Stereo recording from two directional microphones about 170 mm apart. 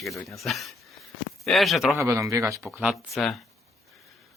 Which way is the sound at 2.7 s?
Centre (ahead or behind).